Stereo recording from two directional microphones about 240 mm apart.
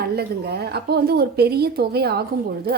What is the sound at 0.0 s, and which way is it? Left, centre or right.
A woman's voice, right.